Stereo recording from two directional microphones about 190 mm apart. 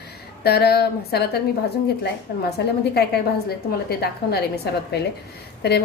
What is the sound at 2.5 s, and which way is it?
A woman's voice, 60° left (ahead or behind).